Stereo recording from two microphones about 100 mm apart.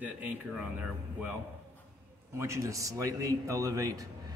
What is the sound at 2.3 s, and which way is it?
A man's voice, 30° right (ahead or behind).